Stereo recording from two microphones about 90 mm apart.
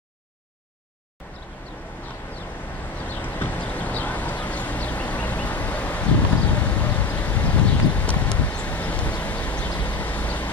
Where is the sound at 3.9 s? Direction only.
20° left (ahead or behind).